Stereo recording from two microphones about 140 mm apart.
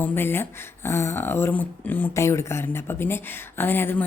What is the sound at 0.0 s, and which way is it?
Speech, 15° left (ahead or behind).